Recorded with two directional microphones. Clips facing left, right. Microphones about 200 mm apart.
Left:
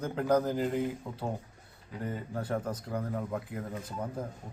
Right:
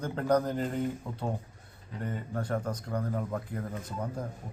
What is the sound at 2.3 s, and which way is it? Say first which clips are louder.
A man's voice: right 1 dB; 5° left (ahead or behind).